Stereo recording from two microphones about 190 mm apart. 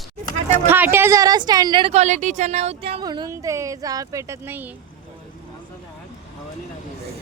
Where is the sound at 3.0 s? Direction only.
20° right (ahead or behind).